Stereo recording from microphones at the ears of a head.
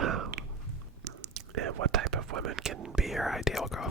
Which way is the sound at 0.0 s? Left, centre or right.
Right.